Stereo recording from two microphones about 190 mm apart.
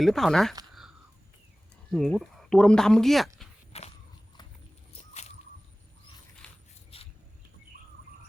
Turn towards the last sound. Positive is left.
turn(degrees=30)  # may be behind; listen again after turning